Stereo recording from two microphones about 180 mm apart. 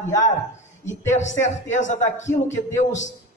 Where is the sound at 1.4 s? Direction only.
40° left (ahead or behind).